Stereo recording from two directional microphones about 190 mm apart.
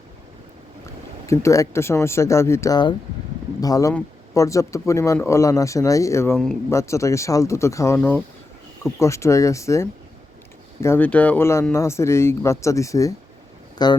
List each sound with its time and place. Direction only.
1.3 s speech: 15° left (ahead or behind)
6.3 s speech: 5° left (ahead or behind)
6.7 s speech: 15° left (ahead or behind)